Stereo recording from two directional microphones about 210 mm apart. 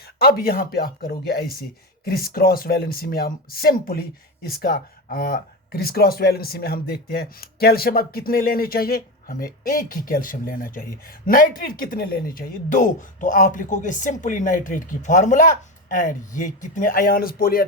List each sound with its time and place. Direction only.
0.0 s speech: 50° left (ahead or behind)